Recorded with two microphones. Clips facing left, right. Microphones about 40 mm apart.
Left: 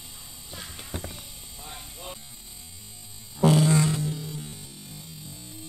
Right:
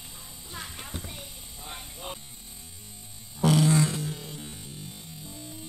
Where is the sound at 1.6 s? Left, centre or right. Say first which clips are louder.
Right 2 dB; right.